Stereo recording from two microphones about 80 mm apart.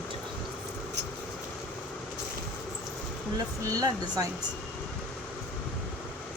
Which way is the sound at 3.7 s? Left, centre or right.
Right.